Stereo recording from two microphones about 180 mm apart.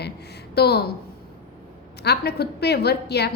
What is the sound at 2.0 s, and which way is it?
A woman's voice, 65° left (ahead or behind).